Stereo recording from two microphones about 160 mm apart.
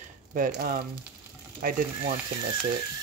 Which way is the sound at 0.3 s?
65° right (ahead or behind).